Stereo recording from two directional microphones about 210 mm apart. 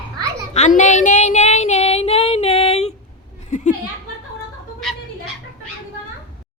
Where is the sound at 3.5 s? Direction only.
35° left (ahead or behind).